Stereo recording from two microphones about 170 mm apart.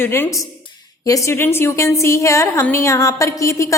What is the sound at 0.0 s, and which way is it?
A woman's voice, 15° left (ahead or behind).